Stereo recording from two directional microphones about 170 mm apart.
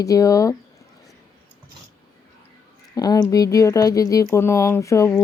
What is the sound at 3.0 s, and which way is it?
Speech, 20° left (ahead or behind).